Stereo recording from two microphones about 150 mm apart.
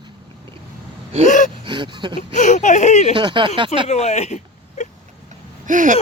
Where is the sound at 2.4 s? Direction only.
55° left (ahead or behind).